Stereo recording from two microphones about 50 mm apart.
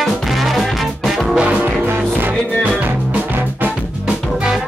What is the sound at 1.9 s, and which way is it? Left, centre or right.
Music, right.